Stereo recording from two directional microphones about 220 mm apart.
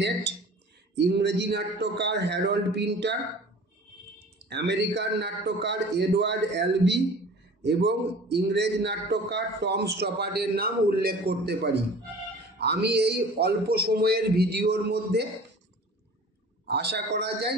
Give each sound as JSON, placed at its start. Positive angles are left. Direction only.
{"t": 0.9, "sound": "a man's voice", "side_deg": -50}
{"t": 4.5, "sound": "a man's voice", "side_deg": -50}
{"t": 16.6, "sound": "a man's voice", "side_deg": -50}